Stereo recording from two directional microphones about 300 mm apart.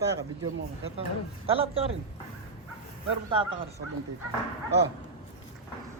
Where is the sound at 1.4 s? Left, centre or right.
Centre.